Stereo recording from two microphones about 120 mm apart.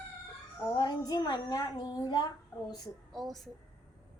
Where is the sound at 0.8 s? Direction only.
35° left (ahead or behind).